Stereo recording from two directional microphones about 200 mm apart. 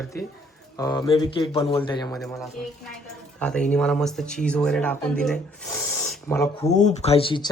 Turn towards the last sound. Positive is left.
turn(degrees=25)  # may be behind; listen again after turning